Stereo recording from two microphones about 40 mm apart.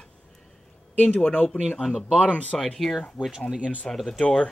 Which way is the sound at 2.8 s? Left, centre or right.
Centre.